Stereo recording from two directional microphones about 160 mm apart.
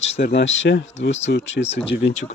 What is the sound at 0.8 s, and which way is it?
Speech, 45° left (ahead or behind).